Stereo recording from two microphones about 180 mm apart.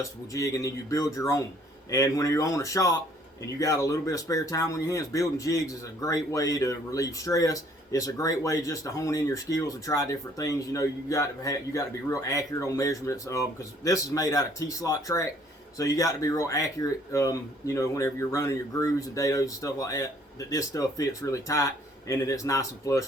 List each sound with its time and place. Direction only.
0.0 s speech: 20° left (ahead or behind)